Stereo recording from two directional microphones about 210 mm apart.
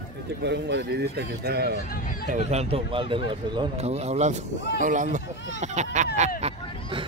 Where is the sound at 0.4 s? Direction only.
55° right (ahead or behind).